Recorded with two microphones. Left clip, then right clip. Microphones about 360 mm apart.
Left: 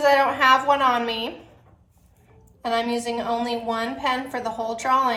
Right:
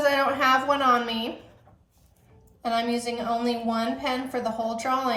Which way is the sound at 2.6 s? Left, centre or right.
Centre.